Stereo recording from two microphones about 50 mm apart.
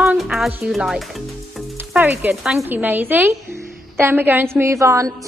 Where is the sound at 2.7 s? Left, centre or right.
Right.